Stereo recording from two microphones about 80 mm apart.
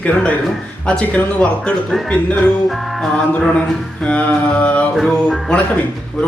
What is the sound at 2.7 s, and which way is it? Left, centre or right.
Music, centre.